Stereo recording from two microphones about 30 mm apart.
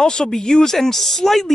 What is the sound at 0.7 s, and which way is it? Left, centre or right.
Speech, centre.